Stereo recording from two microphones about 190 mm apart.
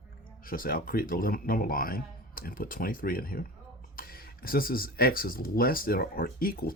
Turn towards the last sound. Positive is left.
turn(degrees=50)  # may be behind; listen again after turning